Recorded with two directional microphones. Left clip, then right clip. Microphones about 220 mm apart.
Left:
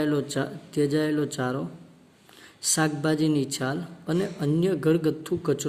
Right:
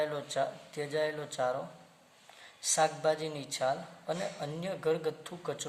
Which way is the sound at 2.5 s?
45° left (ahead or behind).